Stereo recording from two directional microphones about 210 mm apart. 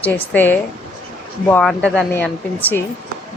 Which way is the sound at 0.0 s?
10° left (ahead or behind).